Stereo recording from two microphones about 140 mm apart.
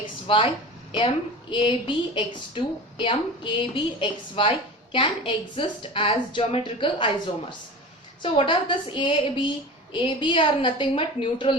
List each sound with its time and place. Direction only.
0.0 s a woman's voice: 40° left (ahead or behind)